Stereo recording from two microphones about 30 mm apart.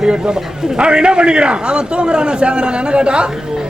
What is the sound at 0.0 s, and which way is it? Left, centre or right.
A man's voice, right.